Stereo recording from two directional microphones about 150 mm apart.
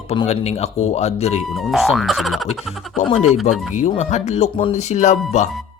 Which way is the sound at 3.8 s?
55° left (ahead or behind).